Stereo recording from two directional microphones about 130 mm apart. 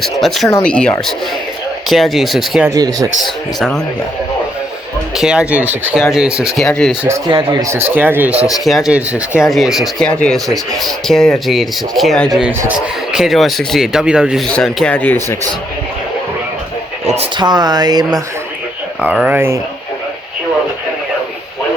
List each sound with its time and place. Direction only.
0.0 s speech: centre (ahead or behind)
2.6 s speech: 30° right (ahead or behind)
5.1 s speech: 5° right (ahead or behind)
7.3 s speech: 35° right (ahead or behind)
7.6 s speech: 20° right (ahead or behind); by 12.4 s 5° left (ahead or behind)
12.4 s speech: 15° right (ahead or behind)
13.1 s speech: centre (ahead or behind)
17.3 s speech: 35° right (ahead or behind)
19.0 s speech: 10° right (ahead or behind)